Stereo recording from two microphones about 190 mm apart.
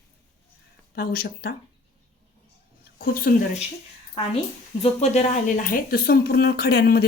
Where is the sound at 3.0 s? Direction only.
50° left (ahead or behind).